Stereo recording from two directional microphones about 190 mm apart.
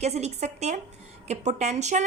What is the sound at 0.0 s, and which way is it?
A woman's voice, 35° right (ahead or behind).